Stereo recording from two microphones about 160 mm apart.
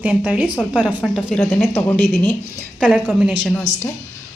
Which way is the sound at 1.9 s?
70° left (ahead or behind).